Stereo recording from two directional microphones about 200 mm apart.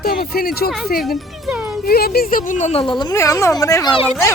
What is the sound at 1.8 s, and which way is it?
Speech, 50° left (ahead or behind).